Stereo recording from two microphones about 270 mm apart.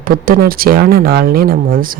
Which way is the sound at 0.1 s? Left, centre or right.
Right.